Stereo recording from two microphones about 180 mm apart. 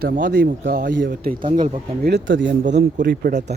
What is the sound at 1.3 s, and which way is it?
Speech, 50° right (ahead or behind).